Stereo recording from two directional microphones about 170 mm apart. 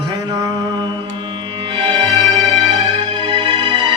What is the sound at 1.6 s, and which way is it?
Music, 30° right (ahead or behind).